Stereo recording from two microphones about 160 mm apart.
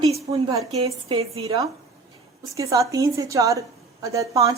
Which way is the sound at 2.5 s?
20° right (ahead or behind).